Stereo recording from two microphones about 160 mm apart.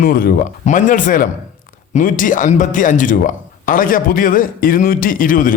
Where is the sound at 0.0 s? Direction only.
65° left (ahead or behind).